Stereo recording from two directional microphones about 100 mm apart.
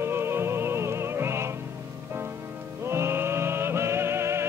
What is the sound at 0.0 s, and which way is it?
Music, 25° right (ahead or behind).